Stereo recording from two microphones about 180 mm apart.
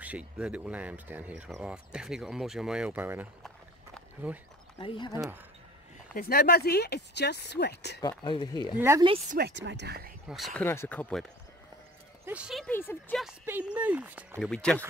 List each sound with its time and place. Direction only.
0.0 s speech: 5° right (ahead or behind)
4.3 s speech: 5° right (ahead or behind)
4.7 s speech: 30° left (ahead or behind)
5.1 s speech: 15° right (ahead or behind)
6.1 s speech: 55° left (ahead or behind)
8.0 s speech: 25° left (ahead or behind)
8.7 s speech: 15° right (ahead or behind)
9.4 s speech: 75° right (ahead or behind)
10.2 s speech: centre (ahead or behind)
10.6 s speech: 10° left (ahead or behind)
12.3 s speech: 5° right (ahead or behind)
12.6 s speech: 10° left (ahead or behind)
13.2 s speech: 5° right (ahead or behind)
14.4 s speech: 5° left (ahead or behind)